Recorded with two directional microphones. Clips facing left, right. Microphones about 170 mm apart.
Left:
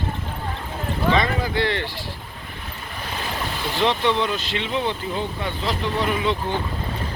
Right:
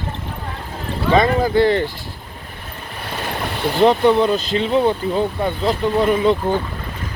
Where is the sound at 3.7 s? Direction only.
40° right (ahead or behind).